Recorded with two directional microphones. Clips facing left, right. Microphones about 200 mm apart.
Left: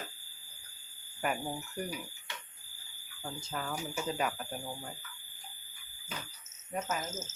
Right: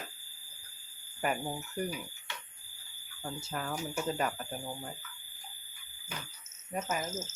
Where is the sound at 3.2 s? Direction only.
5° right (ahead or behind).